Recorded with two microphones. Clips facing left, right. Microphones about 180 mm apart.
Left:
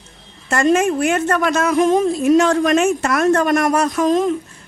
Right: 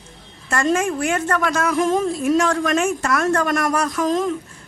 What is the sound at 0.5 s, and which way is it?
A woman's voice, 20° left (ahead or behind).